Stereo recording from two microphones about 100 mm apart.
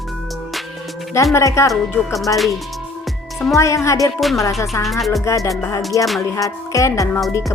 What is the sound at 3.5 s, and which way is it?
Speech, 30° left (ahead or behind).